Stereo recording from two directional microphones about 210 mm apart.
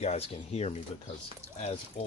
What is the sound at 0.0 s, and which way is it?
Speech, 30° left (ahead or behind).